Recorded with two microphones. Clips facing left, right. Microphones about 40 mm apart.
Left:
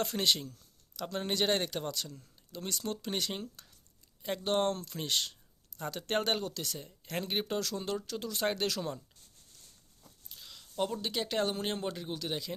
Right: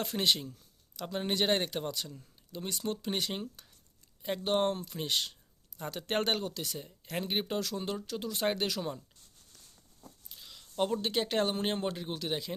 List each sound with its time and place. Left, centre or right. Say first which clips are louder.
0.0 s speech: even; centre
10.2 s a sound: left 3 dB; centre
10.8 s speech: right 3 dB; right